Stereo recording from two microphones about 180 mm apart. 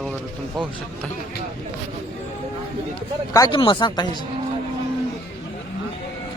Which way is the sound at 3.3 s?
25° left (ahead or behind).